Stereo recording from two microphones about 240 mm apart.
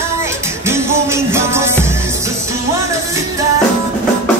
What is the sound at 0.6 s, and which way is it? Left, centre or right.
Music, centre.